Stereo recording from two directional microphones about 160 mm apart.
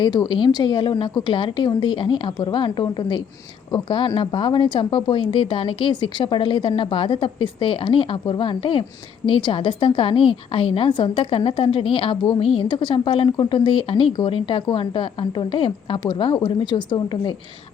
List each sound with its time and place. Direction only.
0.0 s a woman's voice: 30° left (ahead or behind)